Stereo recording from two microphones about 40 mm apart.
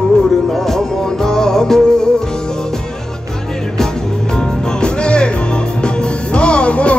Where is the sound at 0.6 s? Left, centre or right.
Centre.